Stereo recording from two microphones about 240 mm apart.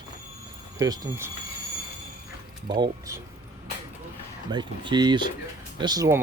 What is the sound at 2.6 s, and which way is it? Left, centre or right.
Speech, centre.